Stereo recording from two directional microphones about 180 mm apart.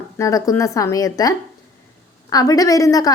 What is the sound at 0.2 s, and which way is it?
A woman's voice, 20° left (ahead or behind).